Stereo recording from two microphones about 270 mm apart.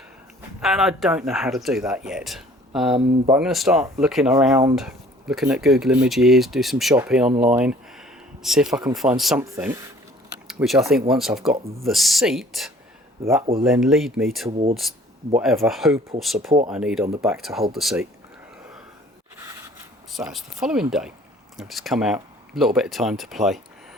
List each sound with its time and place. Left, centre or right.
0.6 s speech: centre
2.9 s speech: centre
3.4 s speech: centre
7.3 s speech: right
7.5 s a sound: centre
8.9 s speech: centre
20.1 s speech: centre